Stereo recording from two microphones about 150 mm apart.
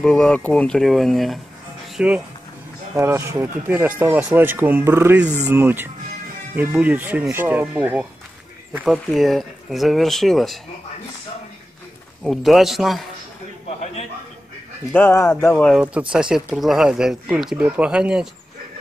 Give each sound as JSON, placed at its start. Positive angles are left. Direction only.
{"t": 0.0, "sound": "speech", "side_deg": 5}
{"t": 3.0, "sound": "speech", "side_deg": -20}
{"t": 12.2, "sound": "speech", "side_deg": 0}
{"t": 14.9, "sound": "speech", "side_deg": 15}
{"t": 16.1, "sound": "speech", "side_deg": -5}